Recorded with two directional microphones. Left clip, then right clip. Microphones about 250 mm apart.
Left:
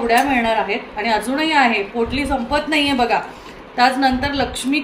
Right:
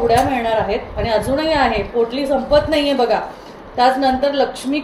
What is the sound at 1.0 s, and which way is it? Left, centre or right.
A woman's voice, left.